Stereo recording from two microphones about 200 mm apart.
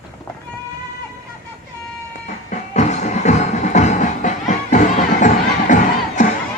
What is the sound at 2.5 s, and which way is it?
Music, 35° left (ahead or behind).